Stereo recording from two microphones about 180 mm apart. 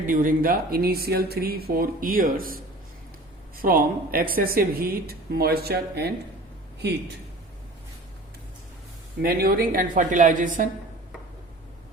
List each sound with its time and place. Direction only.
0.1 s speech: 50° right (ahead or behind)
3.6 s a man's voice: 55° right (ahead or behind)
9.2 s a woman's voice: 55° right (ahead or behind)